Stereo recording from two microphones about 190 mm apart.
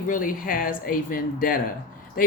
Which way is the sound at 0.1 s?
45° left (ahead or behind).